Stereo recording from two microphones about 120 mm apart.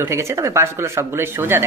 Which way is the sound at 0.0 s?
25° right (ahead or behind).